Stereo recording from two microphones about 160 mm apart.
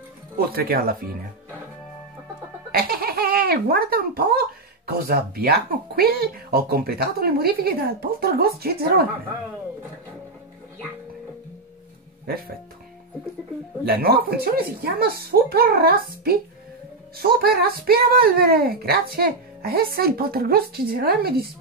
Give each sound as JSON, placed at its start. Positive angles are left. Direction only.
{"t": 0.4, "sound": "speech", "side_deg": -70}
{"t": 2.7, "sound": "speech", "side_deg": -70}
{"t": 13.8, "sound": "speech", "side_deg": -70}